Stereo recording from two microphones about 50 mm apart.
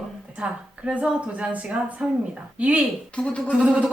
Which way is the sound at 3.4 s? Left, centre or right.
Right.